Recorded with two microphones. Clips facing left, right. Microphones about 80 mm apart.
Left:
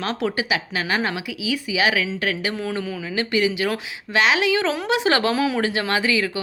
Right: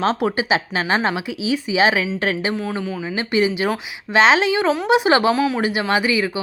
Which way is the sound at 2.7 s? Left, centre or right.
Centre.